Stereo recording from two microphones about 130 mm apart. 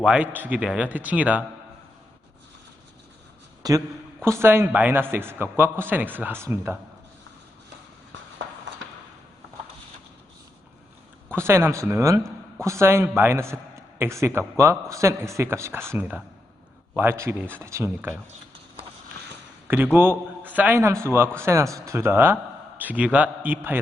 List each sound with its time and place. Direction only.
0.0 s a man's voice: 10° right (ahead or behind)
3.6 s a man's voice: 25° right (ahead or behind)
11.3 s a man's voice: 20° right (ahead or behind)
19.6 s a man's voice: 15° right (ahead or behind)